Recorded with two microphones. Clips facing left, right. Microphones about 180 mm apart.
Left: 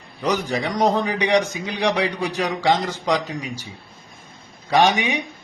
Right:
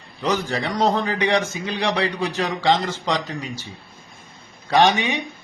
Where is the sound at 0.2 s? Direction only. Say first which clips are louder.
Left 1 dB; 10° left (ahead or behind).